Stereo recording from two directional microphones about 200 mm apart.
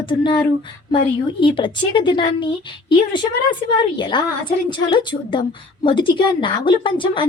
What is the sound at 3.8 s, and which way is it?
A woman's voice, 25° left (ahead or behind).